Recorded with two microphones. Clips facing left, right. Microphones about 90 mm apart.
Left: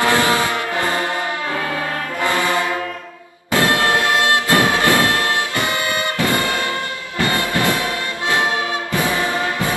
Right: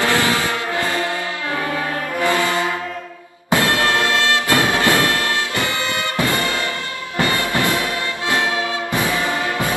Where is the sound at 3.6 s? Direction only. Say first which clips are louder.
Left 3 dB; 20° left (ahead or behind).